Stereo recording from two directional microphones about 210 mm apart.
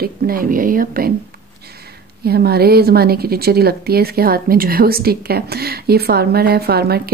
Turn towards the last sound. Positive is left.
turn(degrees=-50)  # may be behind; listen again after turning